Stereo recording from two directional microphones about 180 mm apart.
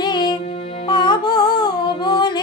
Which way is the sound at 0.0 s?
25° left (ahead or behind).